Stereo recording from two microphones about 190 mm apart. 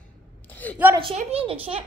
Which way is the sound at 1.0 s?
30° right (ahead or behind).